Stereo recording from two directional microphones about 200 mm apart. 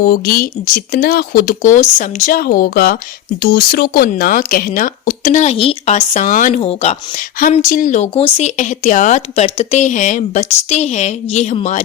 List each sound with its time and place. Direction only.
0.0 s speech: 50° left (ahead or behind)
6.6 s speech: 30° left (ahead or behind)
7.5 s speech: 40° left (ahead or behind)